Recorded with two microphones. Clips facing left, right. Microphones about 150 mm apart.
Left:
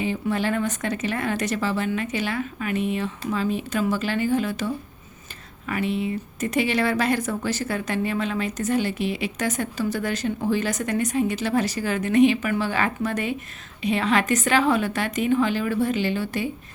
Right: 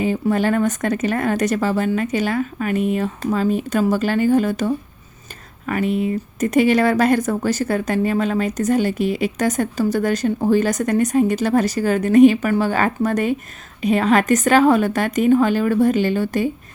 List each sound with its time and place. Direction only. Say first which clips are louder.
0.0 s speech: right 6 dB; 45° right (ahead or behind)